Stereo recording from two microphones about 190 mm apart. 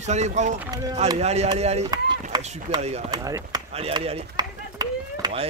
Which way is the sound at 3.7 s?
30° right (ahead or behind).